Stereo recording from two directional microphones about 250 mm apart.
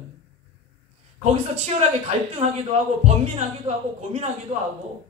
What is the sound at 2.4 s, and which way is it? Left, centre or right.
Speech, right.